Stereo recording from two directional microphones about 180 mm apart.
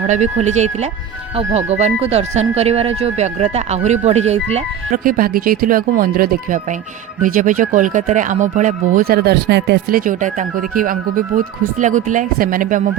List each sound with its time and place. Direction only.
0.1 s speech: 40° right (ahead or behind)
5.0 s speech: 50° right (ahead or behind)